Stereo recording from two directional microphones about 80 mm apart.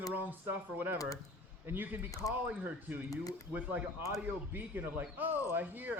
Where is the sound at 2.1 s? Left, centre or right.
Left.